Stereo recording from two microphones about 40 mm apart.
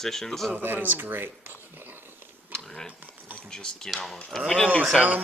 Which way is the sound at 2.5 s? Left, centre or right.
Centre.